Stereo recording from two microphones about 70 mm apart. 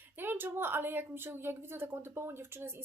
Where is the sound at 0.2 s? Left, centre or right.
Right.